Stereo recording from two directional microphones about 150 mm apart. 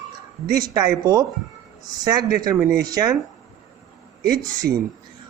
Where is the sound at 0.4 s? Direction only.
30° right (ahead or behind).